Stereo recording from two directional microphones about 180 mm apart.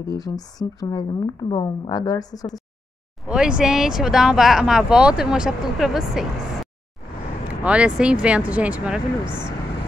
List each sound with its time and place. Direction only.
0.0 s a woman's voice: 20° left (ahead or behind)
3.3 s speech: 5° right (ahead or behind)